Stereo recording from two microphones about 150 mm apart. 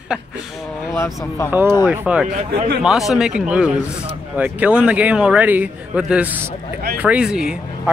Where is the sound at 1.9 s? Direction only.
10° right (ahead or behind).